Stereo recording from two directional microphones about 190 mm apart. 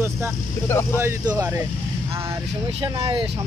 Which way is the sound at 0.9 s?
15° right (ahead or behind).